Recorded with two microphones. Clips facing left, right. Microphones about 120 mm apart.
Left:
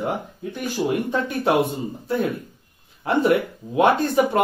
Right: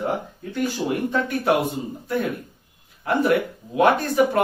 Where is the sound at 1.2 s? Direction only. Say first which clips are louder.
Even; 25° left (ahead or behind).